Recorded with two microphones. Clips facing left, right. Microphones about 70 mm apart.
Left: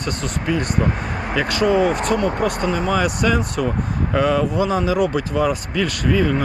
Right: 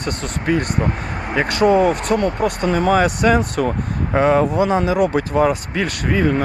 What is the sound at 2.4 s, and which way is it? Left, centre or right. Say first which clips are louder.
Speech: right 1 dB; left.